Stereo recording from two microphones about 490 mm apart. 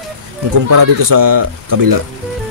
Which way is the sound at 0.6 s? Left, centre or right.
Right.